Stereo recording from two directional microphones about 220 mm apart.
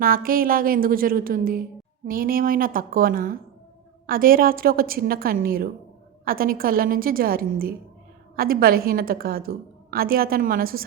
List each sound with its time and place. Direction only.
0.0 s a woman's voice: 40° right (ahead or behind)